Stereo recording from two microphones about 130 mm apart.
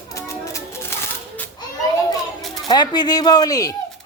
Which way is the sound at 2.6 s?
35° left (ahead or behind).